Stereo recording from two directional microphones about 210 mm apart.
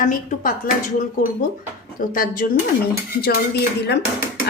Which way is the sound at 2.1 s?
40° left (ahead or behind).